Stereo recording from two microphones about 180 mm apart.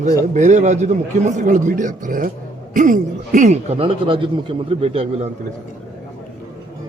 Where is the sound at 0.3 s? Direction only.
40° right (ahead or behind).